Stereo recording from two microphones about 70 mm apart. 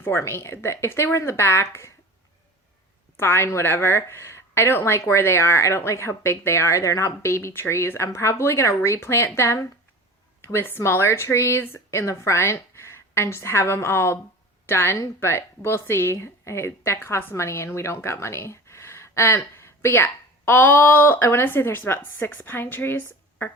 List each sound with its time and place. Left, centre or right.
0.0 s a woman's voice: left
3.2 s a woman's voice: left